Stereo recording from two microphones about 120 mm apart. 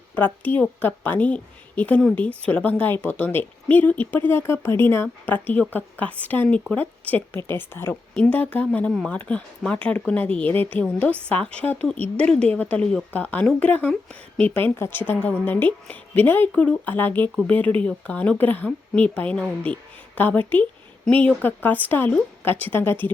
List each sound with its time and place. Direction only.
0.2 s a woman's voice: 15° left (ahead or behind)